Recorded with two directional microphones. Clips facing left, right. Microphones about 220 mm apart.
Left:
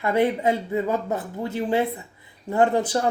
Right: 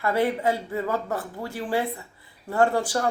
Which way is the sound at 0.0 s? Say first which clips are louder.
Left 2 dB; 20° left (ahead or behind).